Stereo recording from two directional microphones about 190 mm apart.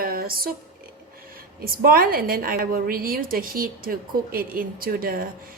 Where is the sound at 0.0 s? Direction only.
50° right (ahead or behind).